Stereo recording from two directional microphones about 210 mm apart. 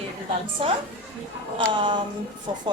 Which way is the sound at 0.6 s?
25° right (ahead or behind).